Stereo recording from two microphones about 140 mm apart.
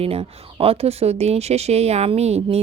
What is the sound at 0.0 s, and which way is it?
Speech, 45° right (ahead or behind).